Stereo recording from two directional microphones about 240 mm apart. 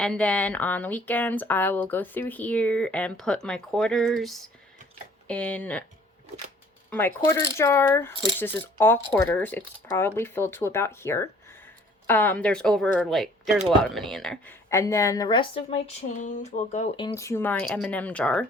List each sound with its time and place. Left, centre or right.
0.0 s speech: centre
6.9 s speech: centre
16.1 s speech: left
17.2 s speech: centre